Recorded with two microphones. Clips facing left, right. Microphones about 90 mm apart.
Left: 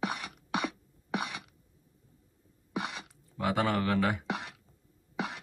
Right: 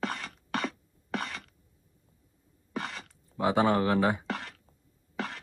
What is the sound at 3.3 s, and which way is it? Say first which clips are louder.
Speech: right 4 dB; 25° right (ahead or behind).